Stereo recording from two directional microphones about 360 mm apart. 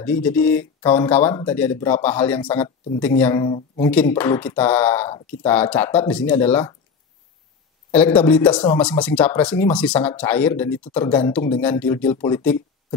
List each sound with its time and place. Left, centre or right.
0.0 s speech: centre
7.9 s speech: centre